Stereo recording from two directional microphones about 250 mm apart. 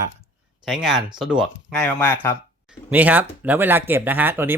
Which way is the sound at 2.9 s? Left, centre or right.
Centre.